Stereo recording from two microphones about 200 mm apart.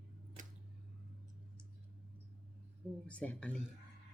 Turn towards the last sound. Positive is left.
turn(degrees=5)  # may be behind; listen again after turning